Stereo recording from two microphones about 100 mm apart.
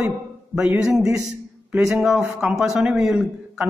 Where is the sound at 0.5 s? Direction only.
10° right (ahead or behind).